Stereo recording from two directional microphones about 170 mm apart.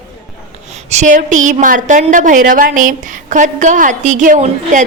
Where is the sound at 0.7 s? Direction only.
40° right (ahead or behind).